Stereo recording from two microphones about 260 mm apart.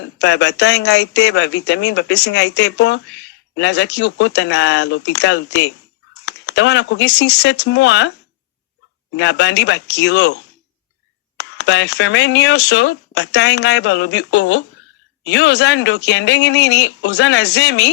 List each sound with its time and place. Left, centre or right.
0.0 s speech: left
9.1 s speech: left
11.3 s speech: left